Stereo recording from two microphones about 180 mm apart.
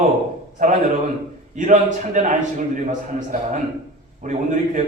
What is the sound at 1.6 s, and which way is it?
A man's voice, 45° right (ahead or behind).